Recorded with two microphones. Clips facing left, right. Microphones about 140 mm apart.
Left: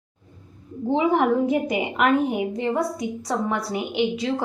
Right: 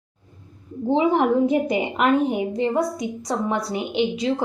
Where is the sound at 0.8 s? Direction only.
20° right (ahead or behind).